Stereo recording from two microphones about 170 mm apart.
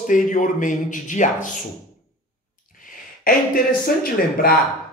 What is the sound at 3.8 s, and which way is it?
Speech, 60° left (ahead or behind).